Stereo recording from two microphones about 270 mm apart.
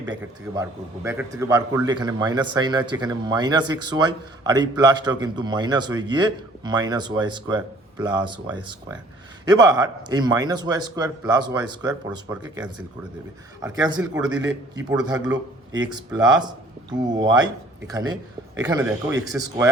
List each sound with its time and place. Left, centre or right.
0.1 s a man's voice: centre